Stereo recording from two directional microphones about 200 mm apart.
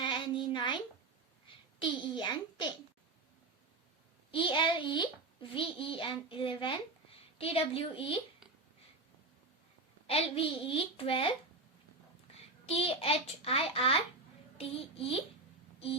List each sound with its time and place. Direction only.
0.0 s a sound: 25° left (ahead or behind)
1.5 s a child's voice: 25° left (ahead or behind)
4.3 s a child's voice: 25° left (ahead or behind)
10.1 s a child's voice: 30° left (ahead or behind)
12.6 s a child's voice: 30° left (ahead or behind)